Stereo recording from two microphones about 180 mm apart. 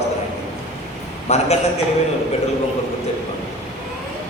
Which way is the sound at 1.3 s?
35° left (ahead or behind).